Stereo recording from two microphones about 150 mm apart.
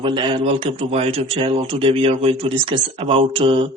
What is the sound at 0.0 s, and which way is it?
A man's voice, 30° right (ahead or behind).